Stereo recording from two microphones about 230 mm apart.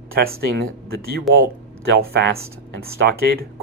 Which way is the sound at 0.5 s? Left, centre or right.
Right.